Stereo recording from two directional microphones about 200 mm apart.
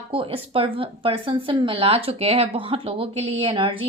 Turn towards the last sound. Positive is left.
turn(degrees=-25)  # may be behind; listen again after turning